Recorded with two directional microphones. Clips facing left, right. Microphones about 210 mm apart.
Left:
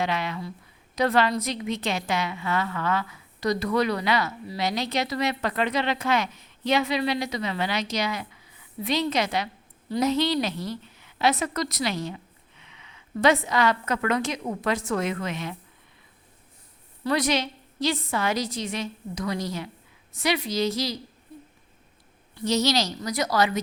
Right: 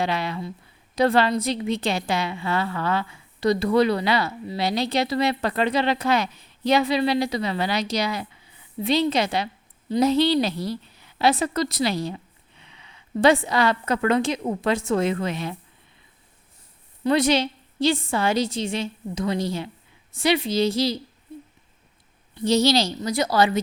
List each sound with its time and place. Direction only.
0.0 s a woman's voice: 35° right (ahead or behind)
17.0 s a woman's voice: 25° right (ahead or behind)
22.4 s a woman's voice: 30° right (ahead or behind)